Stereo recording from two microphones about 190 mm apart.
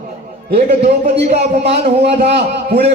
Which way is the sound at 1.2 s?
60° right (ahead or behind).